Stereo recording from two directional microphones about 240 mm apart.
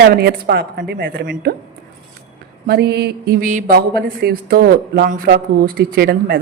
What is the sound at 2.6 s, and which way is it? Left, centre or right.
Speech, right.